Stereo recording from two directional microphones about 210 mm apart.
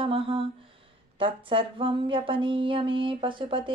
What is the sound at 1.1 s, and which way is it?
Speech, 25° right (ahead or behind).